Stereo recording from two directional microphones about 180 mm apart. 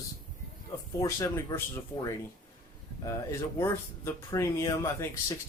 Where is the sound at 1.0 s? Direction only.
15° left (ahead or behind).